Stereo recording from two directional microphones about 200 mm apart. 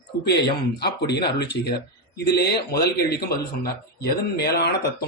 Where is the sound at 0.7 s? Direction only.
55° left (ahead or behind).